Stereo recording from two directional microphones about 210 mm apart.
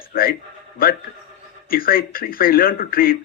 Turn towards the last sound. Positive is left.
turn(degrees=45)  # may be behind; listen again after turning